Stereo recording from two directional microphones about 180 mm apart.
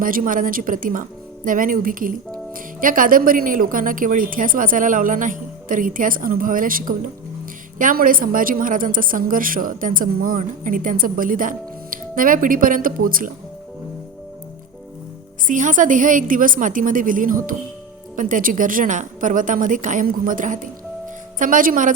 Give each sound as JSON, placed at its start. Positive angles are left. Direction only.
{"t": 0.0, "sound": "a woman's voice", "side_deg": -50}
{"t": 15.4, "sound": "a woman's voice", "side_deg": -45}